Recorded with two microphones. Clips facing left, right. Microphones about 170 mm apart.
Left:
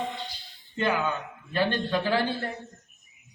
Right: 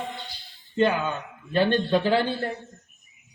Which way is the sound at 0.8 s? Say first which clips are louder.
Right 4 dB; 20° right (ahead or behind).